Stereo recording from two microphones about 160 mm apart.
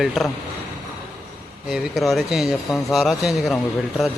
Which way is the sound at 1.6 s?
Centre (ahead or behind).